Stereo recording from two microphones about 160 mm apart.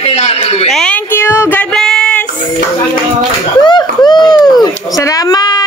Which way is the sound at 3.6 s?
25° left (ahead or behind).